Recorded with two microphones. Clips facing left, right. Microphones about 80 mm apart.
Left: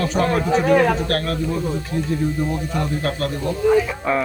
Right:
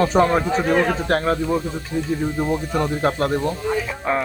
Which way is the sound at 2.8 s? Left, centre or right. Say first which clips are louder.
Right 3 dB; right.